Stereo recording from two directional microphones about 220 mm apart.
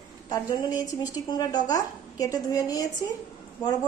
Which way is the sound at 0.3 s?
20° left (ahead or behind).